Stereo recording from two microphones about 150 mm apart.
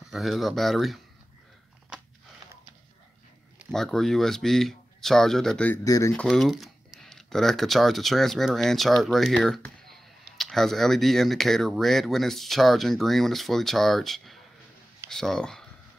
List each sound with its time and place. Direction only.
0.1 s speech: centre (ahead or behind)
3.7 s speech: centre (ahead or behind)
5.9 s speech: 20° left (ahead or behind)
6.1 s speech: centre (ahead or behind)